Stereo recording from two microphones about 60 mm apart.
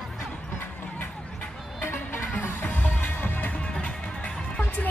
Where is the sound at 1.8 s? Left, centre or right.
Left.